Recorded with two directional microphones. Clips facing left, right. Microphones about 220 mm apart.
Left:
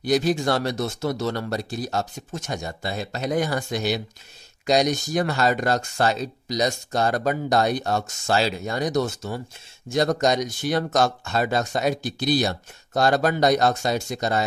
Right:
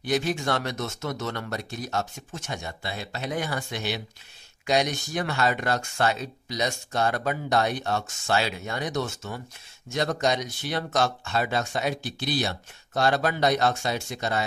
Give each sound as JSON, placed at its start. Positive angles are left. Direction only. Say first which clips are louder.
{"t": 0.0, "sound": "speech", "louder": "left 5 dB", "side_deg": 35}